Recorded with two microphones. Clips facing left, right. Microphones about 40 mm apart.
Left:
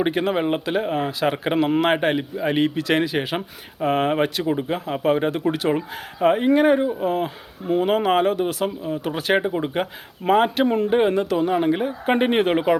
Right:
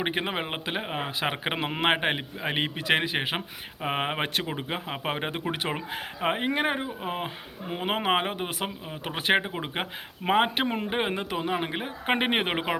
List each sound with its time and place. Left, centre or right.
0.0 s speech: right